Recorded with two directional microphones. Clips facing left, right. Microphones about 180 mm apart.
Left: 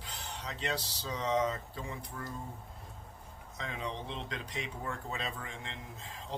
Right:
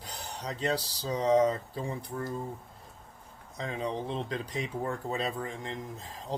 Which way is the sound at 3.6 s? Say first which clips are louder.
Right 6 dB; 35° right (ahead or behind).